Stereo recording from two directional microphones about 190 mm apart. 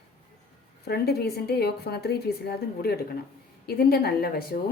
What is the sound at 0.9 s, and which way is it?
A woman's voice, 55° left (ahead or behind).